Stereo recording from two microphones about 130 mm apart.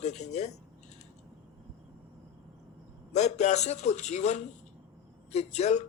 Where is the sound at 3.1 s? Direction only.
65° left (ahead or behind).